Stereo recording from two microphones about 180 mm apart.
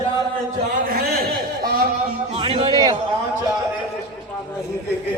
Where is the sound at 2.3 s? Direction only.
30° right (ahead or behind).